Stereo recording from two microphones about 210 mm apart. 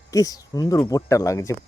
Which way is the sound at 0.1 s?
15° left (ahead or behind).